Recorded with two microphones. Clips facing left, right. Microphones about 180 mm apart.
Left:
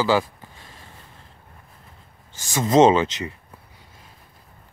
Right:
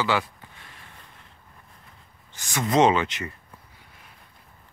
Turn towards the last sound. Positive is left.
turn(degrees=25)  # may be behind; listen again after turning